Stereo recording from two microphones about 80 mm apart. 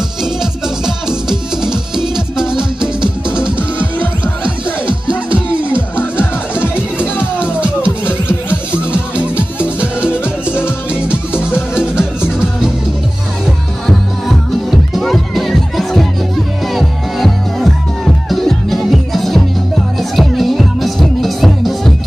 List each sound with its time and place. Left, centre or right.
0.2 s music: centre
4.2 s music: centre
7.8 s music: left
8.9 s music: centre
10.9 s music: centre
11.5 s music: left
11.9 s music: centre
13.8 s music: centre